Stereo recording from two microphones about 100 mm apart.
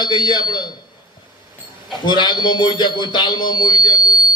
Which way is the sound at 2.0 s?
50° left (ahead or behind).